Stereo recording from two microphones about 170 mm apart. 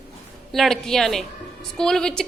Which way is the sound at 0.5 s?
Centre (ahead or behind).